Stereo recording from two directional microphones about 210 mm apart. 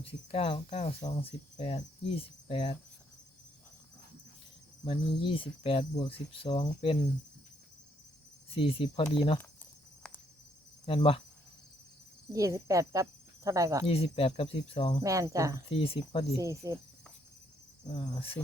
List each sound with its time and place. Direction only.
0.0 s cricket: 25° left (ahead or behind)
4.9 s cricket: 25° left (ahead or behind)
8.4 s cricket: 25° left (ahead or behind)
10.0 s cricket: 5° left (ahead or behind)
10.8 s cricket: 25° left (ahead or behind)
12.3 s speech: 15° right (ahead or behind)
13.8 s cricket: 25° left (ahead or behind)
15.0 s speech: 15° right (ahead or behind)
15.7 s cricket: 25° left (ahead or behind)
16.4 s speech: 15° right (ahead or behind)
18.1 s cricket: 25° left (ahead or behind)